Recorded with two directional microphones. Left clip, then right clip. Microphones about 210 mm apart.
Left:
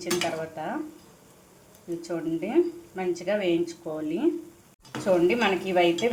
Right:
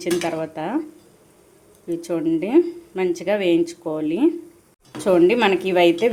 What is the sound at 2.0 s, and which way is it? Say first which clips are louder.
A woman's voice: right 8 dB; 55° right (ahead or behind).